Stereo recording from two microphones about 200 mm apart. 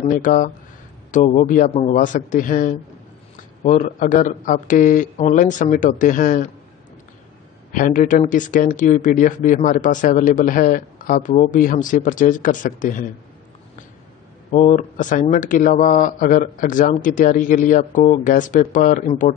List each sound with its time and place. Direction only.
0.0 s speech: 40° left (ahead or behind)
7.7 s speech: 40° left (ahead or behind)
14.5 s speech: 35° left (ahead or behind)